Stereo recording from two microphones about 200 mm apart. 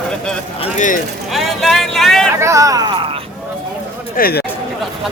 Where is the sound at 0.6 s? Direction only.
40° left (ahead or behind).